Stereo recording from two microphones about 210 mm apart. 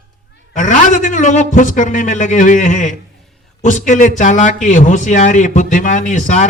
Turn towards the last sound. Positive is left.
turn(degrees=35)  # may be behind; listen again after turning